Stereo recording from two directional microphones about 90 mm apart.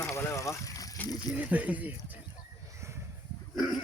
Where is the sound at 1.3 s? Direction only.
15° right (ahead or behind).